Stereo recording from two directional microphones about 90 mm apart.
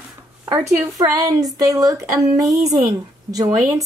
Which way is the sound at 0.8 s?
40° right (ahead or behind).